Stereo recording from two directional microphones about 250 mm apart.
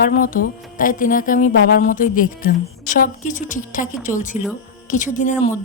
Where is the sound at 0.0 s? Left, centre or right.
Left.